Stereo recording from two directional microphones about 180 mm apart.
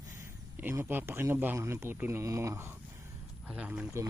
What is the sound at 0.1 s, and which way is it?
Speech, 10° right (ahead or behind).